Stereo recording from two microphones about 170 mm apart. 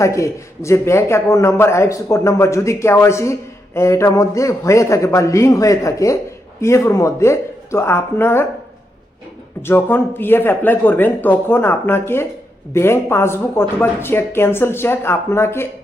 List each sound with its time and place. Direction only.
0.0 s a man's voice: 15° left (ahead or behind)
9.6 s a man's voice: 15° left (ahead or behind)